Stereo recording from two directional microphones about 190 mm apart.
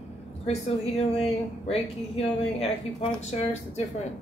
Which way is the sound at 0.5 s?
35° left (ahead or behind).